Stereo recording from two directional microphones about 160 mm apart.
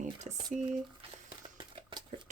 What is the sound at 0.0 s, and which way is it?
Boiling, 45° right (ahead or behind).